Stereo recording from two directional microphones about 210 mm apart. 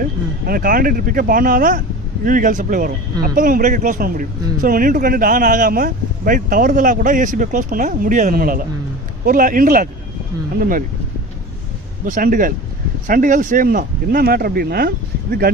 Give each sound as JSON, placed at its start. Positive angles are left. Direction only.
{"t": 0.4, "sound": "a man's voice", "side_deg": -45}
{"t": 12.0, "sound": "a man's voice", "side_deg": -40}